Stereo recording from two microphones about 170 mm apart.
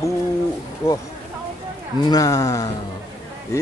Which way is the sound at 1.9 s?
20° left (ahead or behind).